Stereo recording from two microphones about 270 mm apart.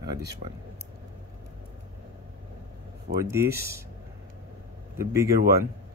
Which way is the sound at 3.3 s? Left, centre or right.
Centre.